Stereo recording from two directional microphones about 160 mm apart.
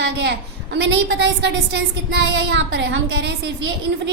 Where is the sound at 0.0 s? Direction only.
90° right.